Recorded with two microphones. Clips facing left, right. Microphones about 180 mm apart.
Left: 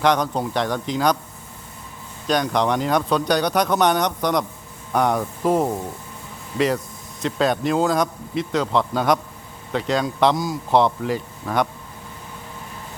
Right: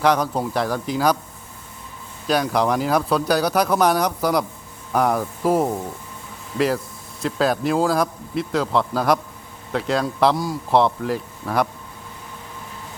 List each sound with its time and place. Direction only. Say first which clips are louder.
0.0 s speech: even; 5° right (ahead or behind)
2.2 s speech: even; 5° right (ahead or behind)
7.2 s speech: even; centre (ahead or behind)